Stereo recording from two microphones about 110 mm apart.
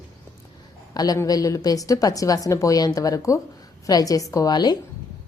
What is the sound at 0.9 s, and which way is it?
A woman's voice, 35° left (ahead or behind).